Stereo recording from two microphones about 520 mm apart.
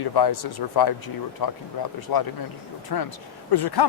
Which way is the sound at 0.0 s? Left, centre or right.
Left.